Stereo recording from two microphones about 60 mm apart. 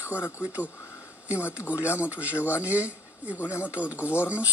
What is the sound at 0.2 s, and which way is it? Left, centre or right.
Speech, right.